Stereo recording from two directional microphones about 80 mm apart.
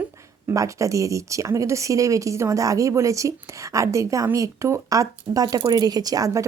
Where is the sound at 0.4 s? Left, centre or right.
Right.